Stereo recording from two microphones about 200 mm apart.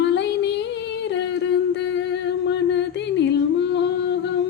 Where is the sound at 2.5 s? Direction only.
60° left (ahead or behind).